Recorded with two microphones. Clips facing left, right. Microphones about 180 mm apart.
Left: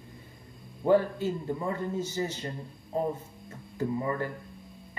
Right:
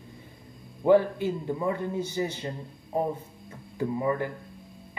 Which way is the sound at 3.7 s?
15° right (ahead or behind).